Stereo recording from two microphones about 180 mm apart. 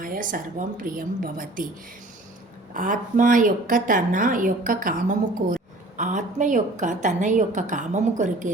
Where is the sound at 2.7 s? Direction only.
45° right (ahead or behind).